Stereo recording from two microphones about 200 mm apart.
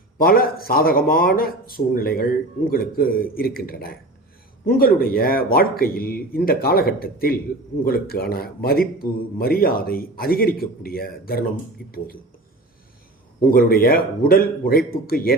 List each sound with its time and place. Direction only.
0.2 s speech: 50° left (ahead or behind)
13.5 s speech: 45° left (ahead or behind)